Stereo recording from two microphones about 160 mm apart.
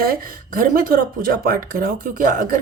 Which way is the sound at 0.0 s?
65° right (ahead or behind).